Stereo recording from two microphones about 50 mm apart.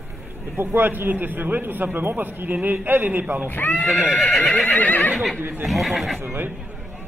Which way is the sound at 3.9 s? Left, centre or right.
Centre.